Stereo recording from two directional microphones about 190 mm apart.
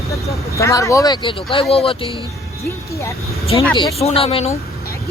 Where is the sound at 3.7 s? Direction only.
30° left (ahead or behind).